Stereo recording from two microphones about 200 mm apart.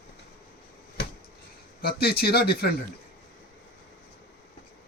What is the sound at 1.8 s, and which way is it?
Speech, 50° left (ahead or behind).